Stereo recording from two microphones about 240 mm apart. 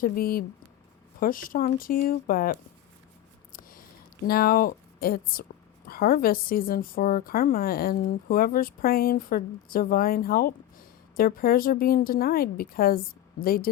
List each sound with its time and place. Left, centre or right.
0.0 s speech: left